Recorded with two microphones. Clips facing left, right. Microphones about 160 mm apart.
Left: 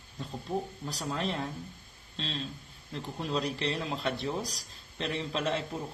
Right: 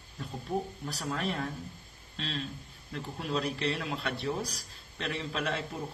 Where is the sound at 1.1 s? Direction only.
25° left (ahead or behind).